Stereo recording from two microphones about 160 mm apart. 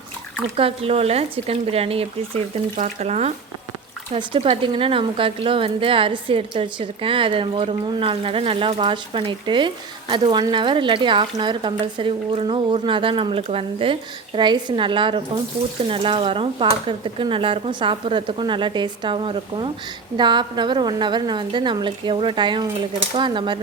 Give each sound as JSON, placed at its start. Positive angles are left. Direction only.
{"t": 0.5, "sound": "a woman's voice", "side_deg": -40}